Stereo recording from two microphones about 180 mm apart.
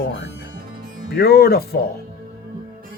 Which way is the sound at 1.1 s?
60° left (ahead or behind).